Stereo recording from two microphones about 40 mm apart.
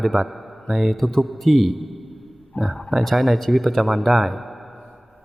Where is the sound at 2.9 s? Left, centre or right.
Centre.